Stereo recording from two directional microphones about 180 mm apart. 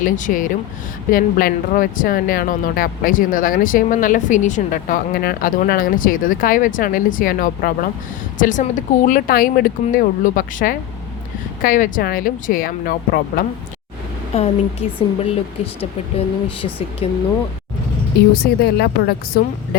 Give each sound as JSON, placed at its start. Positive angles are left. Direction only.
{"t": 0.0, "sound": "speech", "side_deg": 45}
{"t": 14.3, "sound": "a woman's voice", "side_deg": 35}
{"t": 18.3, "sound": "a woman's voice", "side_deg": 60}